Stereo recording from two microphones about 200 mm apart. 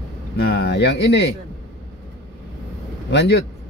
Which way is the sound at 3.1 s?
60° left (ahead or behind).